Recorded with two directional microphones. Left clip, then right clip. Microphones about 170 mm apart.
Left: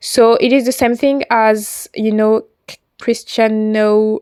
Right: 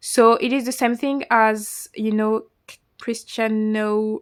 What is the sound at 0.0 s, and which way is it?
Speech, 30° left (ahead or behind).